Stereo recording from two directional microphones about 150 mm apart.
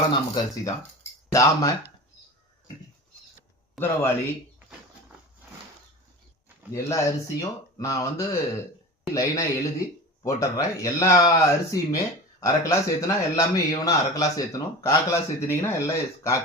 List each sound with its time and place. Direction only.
0.3 s a man's voice: 20° left (ahead or behind)
3.8 s speech: 15° left (ahead or behind)
6.8 s a man's voice: 20° left (ahead or behind)